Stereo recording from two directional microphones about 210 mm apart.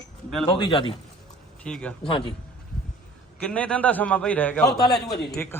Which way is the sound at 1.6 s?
5° left (ahead or behind).